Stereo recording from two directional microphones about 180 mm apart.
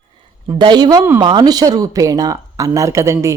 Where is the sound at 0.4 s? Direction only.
25° right (ahead or behind).